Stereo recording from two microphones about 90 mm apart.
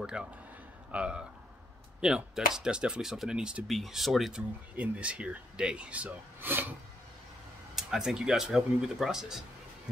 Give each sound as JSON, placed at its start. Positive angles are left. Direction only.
{"t": 0.0, "sound": "speech", "side_deg": -10}
{"t": 4.7, "sound": "speech", "side_deg": -15}
{"t": 7.7, "sound": "speech", "side_deg": -5}